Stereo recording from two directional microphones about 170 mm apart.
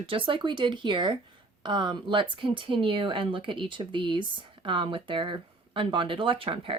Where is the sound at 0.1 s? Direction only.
30° right (ahead or behind).